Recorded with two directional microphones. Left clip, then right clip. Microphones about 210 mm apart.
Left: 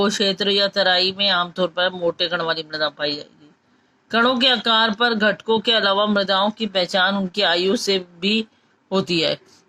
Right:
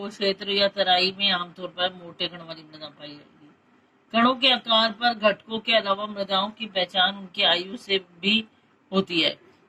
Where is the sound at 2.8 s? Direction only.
45° left (ahead or behind).